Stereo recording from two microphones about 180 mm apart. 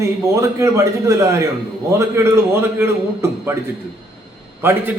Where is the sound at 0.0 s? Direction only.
15° right (ahead or behind).